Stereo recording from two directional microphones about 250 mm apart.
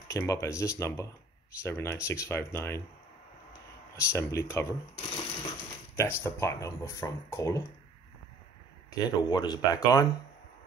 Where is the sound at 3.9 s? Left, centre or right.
Centre.